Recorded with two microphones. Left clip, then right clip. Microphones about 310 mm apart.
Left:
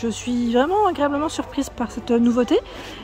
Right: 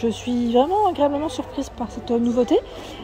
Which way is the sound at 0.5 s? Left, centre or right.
Left.